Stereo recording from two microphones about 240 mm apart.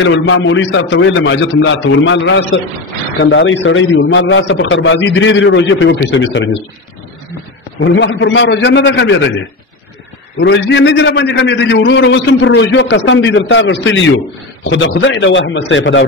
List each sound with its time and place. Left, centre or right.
0.0 s a man's voice: left
7.9 s a man's voice: left
10.4 s a man's voice: left